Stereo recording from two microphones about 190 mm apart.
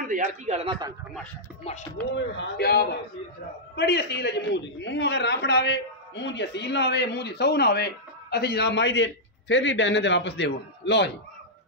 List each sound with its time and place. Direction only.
0.0 s a man's voice: 40° right (ahead or behind)
2.0 s a man's voice: 70° left (ahead or behind)